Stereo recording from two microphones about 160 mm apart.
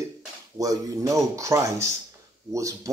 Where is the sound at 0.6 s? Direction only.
20° right (ahead or behind).